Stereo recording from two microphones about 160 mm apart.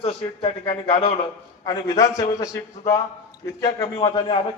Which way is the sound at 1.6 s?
20° left (ahead or behind).